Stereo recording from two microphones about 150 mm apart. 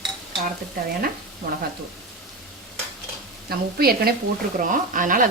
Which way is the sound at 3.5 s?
90° right.